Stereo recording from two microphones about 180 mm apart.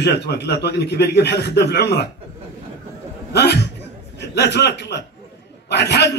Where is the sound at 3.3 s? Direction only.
65° left (ahead or behind).